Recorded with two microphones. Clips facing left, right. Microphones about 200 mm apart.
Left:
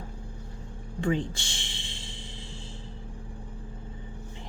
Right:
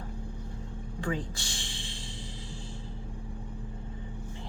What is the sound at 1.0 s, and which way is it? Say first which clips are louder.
Music: left 6 dB; 25° left (ahead or behind).